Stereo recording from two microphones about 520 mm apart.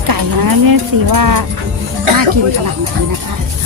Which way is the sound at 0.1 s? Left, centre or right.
Right.